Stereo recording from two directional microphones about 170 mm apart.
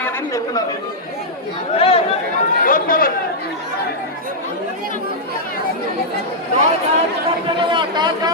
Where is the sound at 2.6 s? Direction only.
55° left (ahead or behind).